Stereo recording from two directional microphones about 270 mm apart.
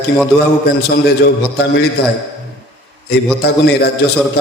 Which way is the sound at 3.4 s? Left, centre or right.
Left.